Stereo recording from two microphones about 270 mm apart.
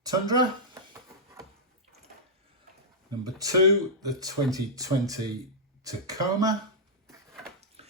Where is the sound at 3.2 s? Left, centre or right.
Centre.